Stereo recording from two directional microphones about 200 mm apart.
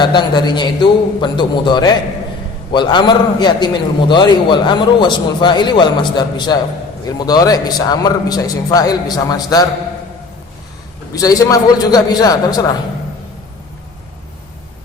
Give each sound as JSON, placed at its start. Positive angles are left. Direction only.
{"t": 0.0, "sound": "a man's voice", "side_deg": 20}
{"t": 11.1, "sound": "a man's voice", "side_deg": 15}